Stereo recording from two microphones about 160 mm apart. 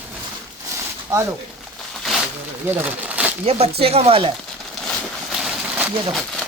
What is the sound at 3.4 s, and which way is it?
Speech, 40° right (ahead or behind).